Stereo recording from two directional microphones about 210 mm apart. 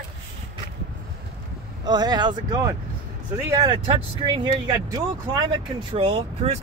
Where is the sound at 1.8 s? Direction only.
20° right (ahead or behind).